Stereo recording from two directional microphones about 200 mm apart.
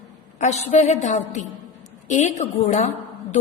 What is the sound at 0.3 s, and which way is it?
A woman's voice, 35° left (ahead or behind).